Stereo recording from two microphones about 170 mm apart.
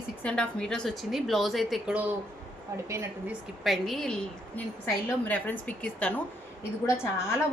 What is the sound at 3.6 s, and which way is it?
A woman's voice, centre (ahead or behind).